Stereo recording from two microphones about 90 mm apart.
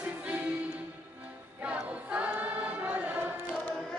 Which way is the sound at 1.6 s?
15° right (ahead or behind).